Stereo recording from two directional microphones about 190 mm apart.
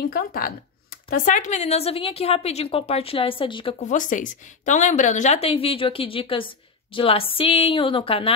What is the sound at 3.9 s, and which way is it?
A woman's voice, 40° left (ahead or behind).